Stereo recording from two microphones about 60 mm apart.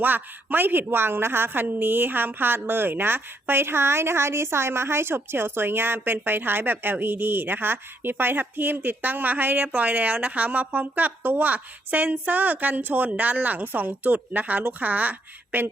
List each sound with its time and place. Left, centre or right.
0.0 s a woman's voice: right